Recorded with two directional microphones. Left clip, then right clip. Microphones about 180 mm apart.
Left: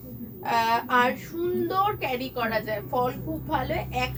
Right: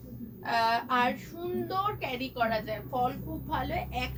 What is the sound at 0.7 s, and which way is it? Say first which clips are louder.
A woman's voice: left 5 dB; 15° left (ahead or behind).